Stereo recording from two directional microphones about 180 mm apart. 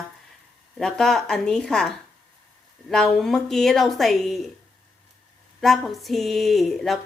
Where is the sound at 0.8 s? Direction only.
5° left (ahead or behind).